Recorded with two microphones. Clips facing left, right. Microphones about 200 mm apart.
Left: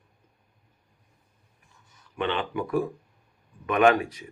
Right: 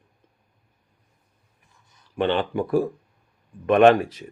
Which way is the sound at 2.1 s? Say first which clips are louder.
Right 6 dB; 35° right (ahead or behind).